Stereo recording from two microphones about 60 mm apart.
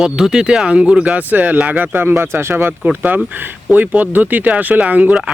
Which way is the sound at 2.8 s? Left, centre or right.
Right.